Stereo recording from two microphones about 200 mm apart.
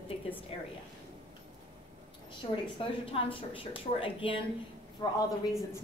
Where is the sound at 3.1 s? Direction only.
25° left (ahead or behind).